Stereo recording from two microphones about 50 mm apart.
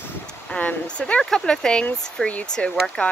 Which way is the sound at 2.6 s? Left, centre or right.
Left.